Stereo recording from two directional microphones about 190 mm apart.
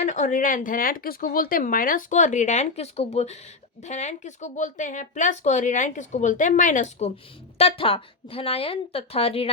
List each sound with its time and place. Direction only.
0.0 s speech: 40° left (ahead or behind)
7.6 s speech: 30° left (ahead or behind)